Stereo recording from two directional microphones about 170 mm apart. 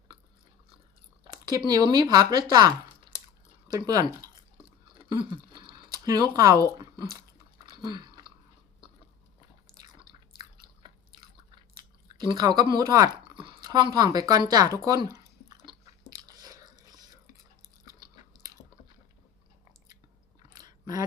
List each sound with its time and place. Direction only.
1.2 s speech: 25° right (ahead or behind)
3.7 s a sound: 20° right (ahead or behind)
6.7 s speech: 25° right (ahead or behind)
7.7 s a sound: 25° right (ahead or behind)
9.8 s a sound: 25° right (ahead or behind)
10.8 s drip: 25° right (ahead or behind)
11.8 s speech: 25° right (ahead or behind)
16.1 s chewing: 20° right (ahead or behind)
20.6 s chewing: 20° right (ahead or behind)